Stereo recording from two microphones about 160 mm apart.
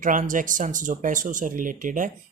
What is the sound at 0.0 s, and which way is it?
Speech, 55° right (ahead or behind).